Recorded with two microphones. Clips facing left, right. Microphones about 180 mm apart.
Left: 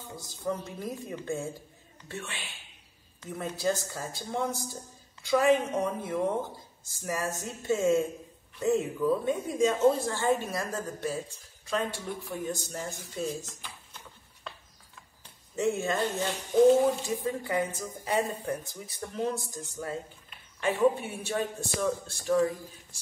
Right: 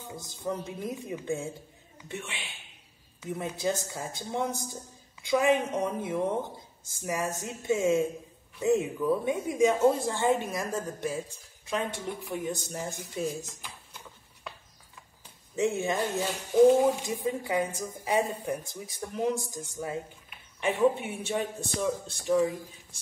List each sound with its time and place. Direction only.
0.7 s speech: 15° right (ahead or behind)
6.9 s speech: 15° right (ahead or behind)
15.5 s speech: 15° right (ahead or behind)
20.6 s speech: 20° right (ahead or behind)